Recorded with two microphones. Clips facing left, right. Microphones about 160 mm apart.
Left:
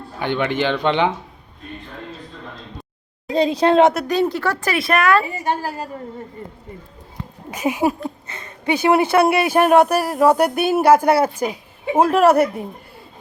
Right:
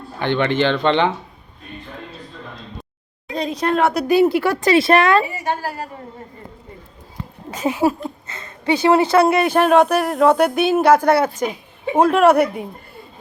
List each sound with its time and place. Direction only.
0.2 s speech: 10° left (ahead or behind)
3.3 s speech: 30° left (ahead or behind)
3.9 s speech: 10° right (ahead or behind)
4.7 s speech: 30° right (ahead or behind)
7.5 s speech: 15° left (ahead or behind)